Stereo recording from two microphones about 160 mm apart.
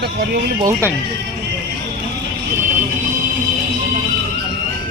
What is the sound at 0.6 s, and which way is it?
Speech, 15° right (ahead or behind).